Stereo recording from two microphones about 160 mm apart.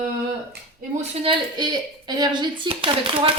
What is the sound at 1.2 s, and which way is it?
Speech, 30° right (ahead or behind).